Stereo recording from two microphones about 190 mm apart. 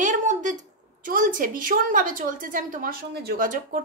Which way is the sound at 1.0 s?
45° right (ahead or behind).